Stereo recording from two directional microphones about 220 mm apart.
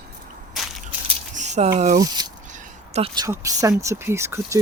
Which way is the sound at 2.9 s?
25° right (ahead or behind).